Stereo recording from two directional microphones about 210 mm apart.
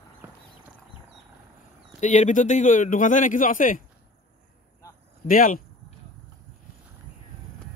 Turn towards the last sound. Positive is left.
turn(degrees=40)  # may be behind; listen again after turning